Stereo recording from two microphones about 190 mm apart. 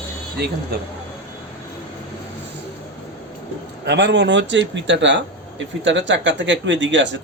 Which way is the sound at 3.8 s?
65° right (ahead or behind).